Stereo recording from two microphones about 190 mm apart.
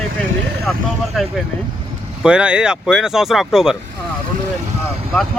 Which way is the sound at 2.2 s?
5° right (ahead or behind).